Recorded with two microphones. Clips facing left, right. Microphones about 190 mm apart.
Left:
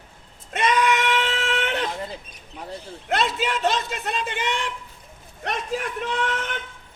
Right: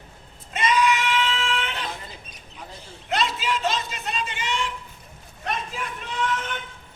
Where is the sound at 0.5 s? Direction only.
55° left (ahead or behind).